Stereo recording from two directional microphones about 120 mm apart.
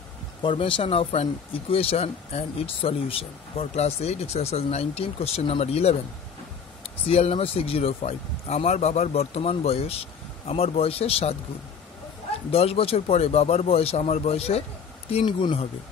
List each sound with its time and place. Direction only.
0.4 s speech: 45° left (ahead or behind)
7.1 s speech: 55° left (ahead or behind)
12.4 s speech: 55° left (ahead or behind)
15.2 s speech: 40° left (ahead or behind)